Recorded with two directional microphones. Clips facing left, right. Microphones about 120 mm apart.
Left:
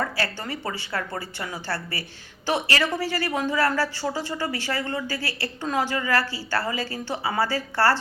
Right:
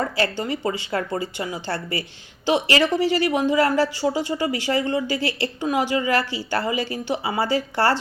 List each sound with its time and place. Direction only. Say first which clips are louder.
0.2 s speech: right 6 dB; 20° right (ahead or behind)